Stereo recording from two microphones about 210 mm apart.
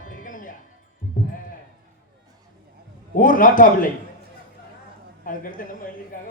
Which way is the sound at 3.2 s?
40° left (ahead or behind).